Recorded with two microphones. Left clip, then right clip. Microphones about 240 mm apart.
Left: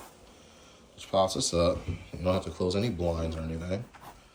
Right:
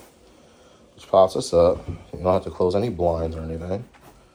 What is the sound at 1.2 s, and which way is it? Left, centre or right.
Speech, centre.